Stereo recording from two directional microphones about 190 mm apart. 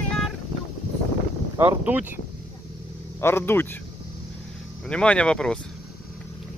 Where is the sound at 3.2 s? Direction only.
10° left (ahead or behind).